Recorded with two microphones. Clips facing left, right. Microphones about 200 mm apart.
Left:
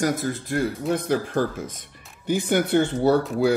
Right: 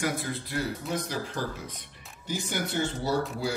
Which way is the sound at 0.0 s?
40° left (ahead or behind).